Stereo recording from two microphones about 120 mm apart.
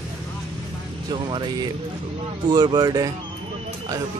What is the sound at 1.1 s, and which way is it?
Speech, 40° right (ahead or behind).